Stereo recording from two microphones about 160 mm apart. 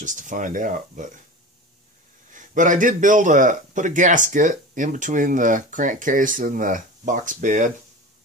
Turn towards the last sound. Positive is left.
turn(degrees=-55)  # may be behind; listen again after turning